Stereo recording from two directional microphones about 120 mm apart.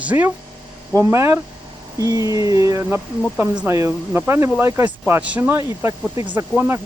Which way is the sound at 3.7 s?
25° right (ahead or behind).